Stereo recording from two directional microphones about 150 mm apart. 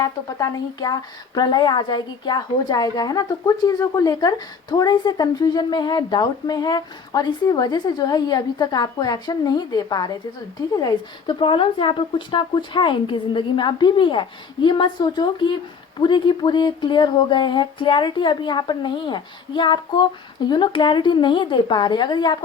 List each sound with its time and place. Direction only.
0.0 s speech: 20° left (ahead or behind)